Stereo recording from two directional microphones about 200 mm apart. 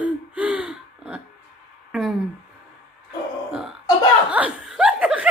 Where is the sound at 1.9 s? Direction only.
Centre (ahead or behind).